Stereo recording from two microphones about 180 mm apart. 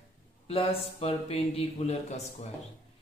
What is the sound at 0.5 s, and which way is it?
A man's voice, 30° left (ahead or behind).